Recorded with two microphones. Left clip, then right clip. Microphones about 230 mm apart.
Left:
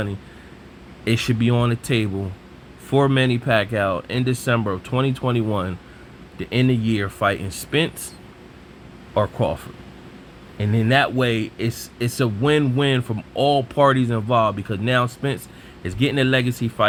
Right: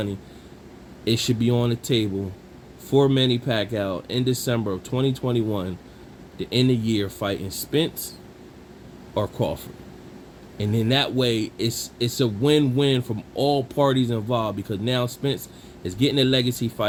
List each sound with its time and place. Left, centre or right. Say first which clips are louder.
1.0 s speech: left 1 dB; left
9.1 s speech: left 4 dB; left
10.6 s speech: left 4 dB; left